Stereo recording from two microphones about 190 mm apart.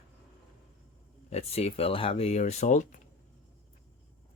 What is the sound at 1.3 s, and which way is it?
Speech, 35° left (ahead or behind).